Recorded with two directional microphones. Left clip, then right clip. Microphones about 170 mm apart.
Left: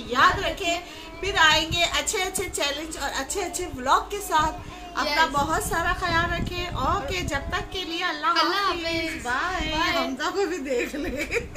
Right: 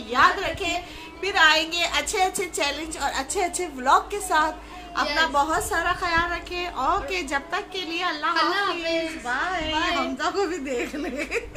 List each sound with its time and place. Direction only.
0.1 s a sound: 25° right (ahead or behind)
1.2 s a woman's voice: 20° right (ahead or behind)
8.4 s speech: 15° left (ahead or behind)
9.2 s a woman's voice: 20° right (ahead or behind)